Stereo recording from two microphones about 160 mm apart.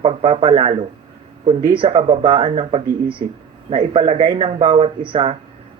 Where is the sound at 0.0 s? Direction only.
35° right (ahead or behind).